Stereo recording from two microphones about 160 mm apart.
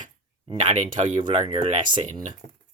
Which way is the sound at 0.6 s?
45° right (ahead or behind).